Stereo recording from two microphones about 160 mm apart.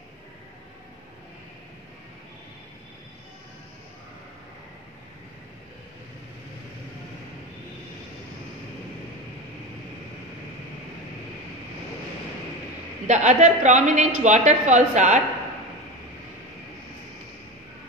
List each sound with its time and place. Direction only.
13.0 s a woman's voice: 50° right (ahead or behind)